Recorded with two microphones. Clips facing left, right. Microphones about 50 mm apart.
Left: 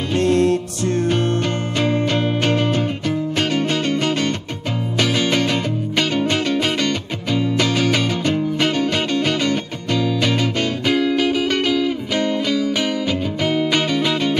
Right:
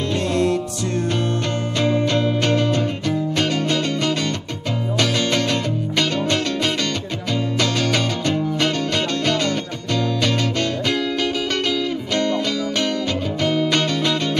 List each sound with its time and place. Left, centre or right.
0.2 s music: left
1.8 s music: centre